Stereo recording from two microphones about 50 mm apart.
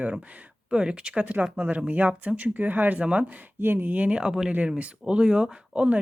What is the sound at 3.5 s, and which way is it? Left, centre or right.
Speech, right.